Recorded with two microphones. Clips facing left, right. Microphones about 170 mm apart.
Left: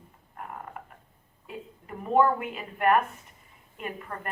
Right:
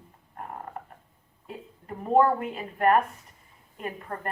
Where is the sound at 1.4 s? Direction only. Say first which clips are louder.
Even; 35° right (ahead or behind).